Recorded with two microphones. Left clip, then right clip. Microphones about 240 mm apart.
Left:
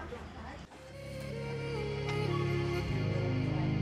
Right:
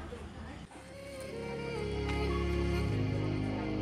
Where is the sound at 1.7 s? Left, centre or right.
Centre.